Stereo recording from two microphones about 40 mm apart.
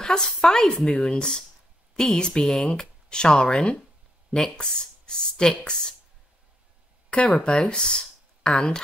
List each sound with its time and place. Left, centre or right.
0.0 s speech: centre
7.3 s speech: left